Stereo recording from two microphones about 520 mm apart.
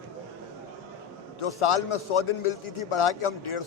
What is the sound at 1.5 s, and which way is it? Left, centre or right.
A man's voice, left.